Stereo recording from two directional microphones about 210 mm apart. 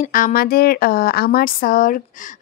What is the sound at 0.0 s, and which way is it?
Speech, 40° left (ahead or behind).